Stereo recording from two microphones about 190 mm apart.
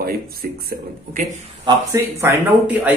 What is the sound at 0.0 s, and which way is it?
A man's voice, 50° right (ahead or behind).